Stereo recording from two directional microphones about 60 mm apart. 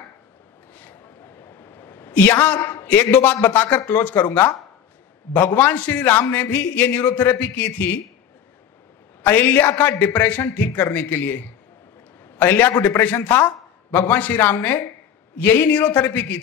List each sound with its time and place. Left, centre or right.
0.7 s a sound: left
2.4 s a man's voice: left
9.2 s a man's voice: left